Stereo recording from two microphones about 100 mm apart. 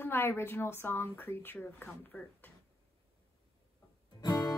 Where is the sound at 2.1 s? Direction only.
10° left (ahead or behind).